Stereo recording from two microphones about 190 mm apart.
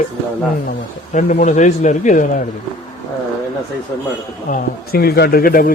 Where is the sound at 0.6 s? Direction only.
40° left (ahead or behind).